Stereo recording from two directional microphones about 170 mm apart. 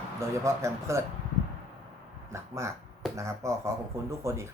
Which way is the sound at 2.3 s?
15° right (ahead or behind).